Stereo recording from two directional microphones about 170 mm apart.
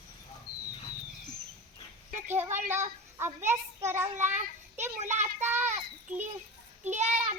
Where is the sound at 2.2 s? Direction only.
15° right (ahead or behind).